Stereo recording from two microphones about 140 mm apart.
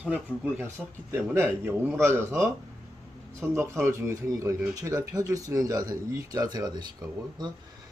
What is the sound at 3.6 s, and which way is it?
Speech, 20° right (ahead or behind).